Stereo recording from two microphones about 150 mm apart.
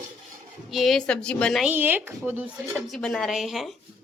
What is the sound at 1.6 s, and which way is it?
Speech, 10° right (ahead or behind).